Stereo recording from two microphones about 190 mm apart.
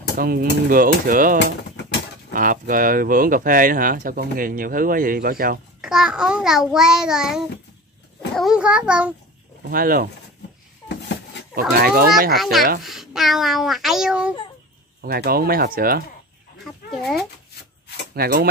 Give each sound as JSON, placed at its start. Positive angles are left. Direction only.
{"t": 0.2, "sound": "speech", "side_deg": -50}
{"t": 5.8, "sound": "a child's voice", "side_deg": -5}
{"t": 9.7, "sound": "speech", "side_deg": -50}
{"t": 11.5, "sound": "speech", "side_deg": -50}
{"t": 12.4, "sound": "a child's voice", "side_deg": 0}
{"t": 15.0, "sound": "speech", "side_deg": -55}
{"t": 16.6, "sound": "speech", "side_deg": 0}
{"t": 18.1, "sound": "speech", "side_deg": -50}